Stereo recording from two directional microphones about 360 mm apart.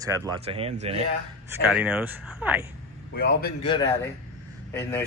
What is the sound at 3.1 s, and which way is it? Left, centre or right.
Speech, left.